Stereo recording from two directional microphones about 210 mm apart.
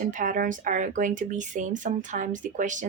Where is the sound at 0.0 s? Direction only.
35° right (ahead or behind).